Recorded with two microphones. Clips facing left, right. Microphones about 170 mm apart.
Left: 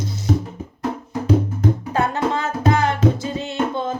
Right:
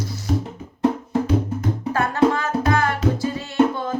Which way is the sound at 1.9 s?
20° left (ahead or behind).